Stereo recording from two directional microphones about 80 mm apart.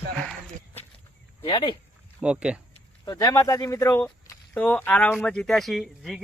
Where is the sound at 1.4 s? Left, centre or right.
Left.